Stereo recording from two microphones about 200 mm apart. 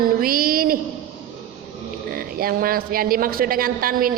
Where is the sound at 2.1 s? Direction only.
45° right (ahead or behind).